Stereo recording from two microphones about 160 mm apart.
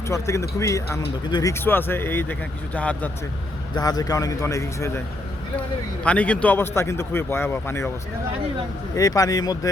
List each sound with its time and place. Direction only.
0.1 s speech: 20° left (ahead or behind)
3.8 s a man's voice: 25° left (ahead or behind)
6.0 s speech: 10° left (ahead or behind)
9.0 s a man's voice: 20° left (ahead or behind)